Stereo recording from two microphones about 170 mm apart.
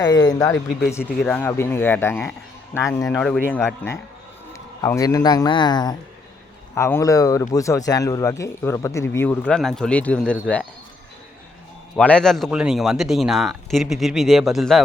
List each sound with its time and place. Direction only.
0.0 s speech: 20° left (ahead or behind)
1.2 s speech: 10° left (ahead or behind)
3.1 s a man's voice: 5° left (ahead or behind)
11.9 s a man's voice: 5° left (ahead or behind)